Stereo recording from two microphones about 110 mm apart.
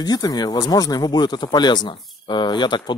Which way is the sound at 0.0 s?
35° left (ahead or behind).